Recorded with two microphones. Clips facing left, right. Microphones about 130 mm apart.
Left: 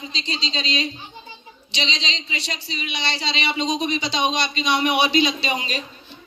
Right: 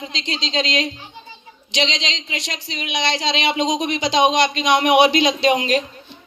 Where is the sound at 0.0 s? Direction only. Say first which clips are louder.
Right 2 dB; 90° right.